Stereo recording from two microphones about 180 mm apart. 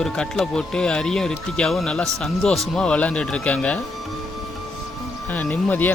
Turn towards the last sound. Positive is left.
turn(degrees=10)  # may be behind; listen again after turning